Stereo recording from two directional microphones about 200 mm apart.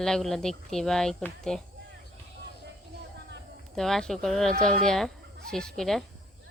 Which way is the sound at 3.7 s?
Centre (ahead or behind).